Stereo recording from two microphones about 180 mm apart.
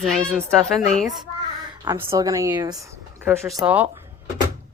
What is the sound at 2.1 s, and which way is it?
Speech, 20° right (ahead or behind).